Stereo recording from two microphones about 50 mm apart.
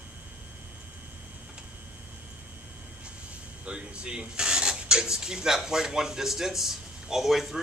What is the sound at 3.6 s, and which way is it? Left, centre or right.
Speech, centre.